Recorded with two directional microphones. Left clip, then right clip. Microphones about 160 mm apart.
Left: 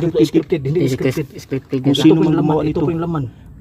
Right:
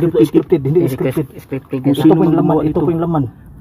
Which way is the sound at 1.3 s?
90° left.